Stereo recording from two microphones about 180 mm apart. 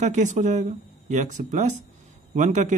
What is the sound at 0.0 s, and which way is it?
A man's voice, 40° right (ahead or behind).